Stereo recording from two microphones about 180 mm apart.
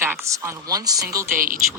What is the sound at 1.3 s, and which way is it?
Speech, 50° right (ahead or behind).